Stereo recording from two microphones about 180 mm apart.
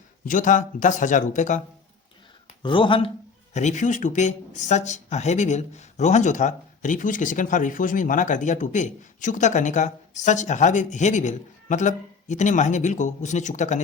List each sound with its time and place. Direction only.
0.3 s speech: 45° left (ahead or behind)
2.6 s speech: 30° left (ahead or behind)
3.5 s speech: 40° left (ahead or behind)